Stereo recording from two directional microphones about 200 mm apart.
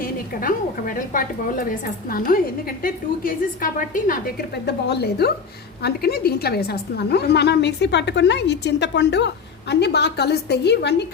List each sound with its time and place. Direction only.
0.0 s a woman's voice: 45° left (ahead or behind)